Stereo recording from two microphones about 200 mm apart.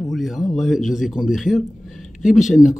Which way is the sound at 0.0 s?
Centre (ahead or behind).